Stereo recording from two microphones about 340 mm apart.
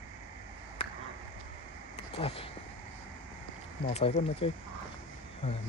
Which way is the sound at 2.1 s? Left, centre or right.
Centre.